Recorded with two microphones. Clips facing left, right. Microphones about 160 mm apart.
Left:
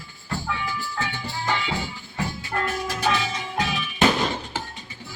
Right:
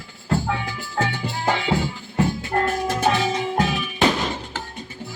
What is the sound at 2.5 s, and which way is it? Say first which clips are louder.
Music: right 5 dB; 50° right (ahead or behind).